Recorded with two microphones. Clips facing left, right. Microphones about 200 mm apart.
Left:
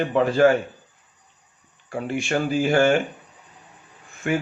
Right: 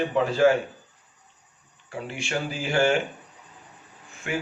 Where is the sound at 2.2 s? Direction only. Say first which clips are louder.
Left 8 dB; 50° left (ahead or behind).